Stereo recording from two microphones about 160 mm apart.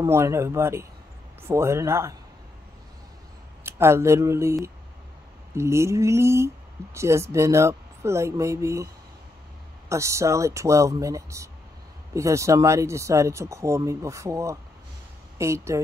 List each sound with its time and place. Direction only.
0.0 s speech: 15° right (ahead or behind)
3.6 s speech: 15° right (ahead or behind)
9.8 s speech: 20° right (ahead or behind)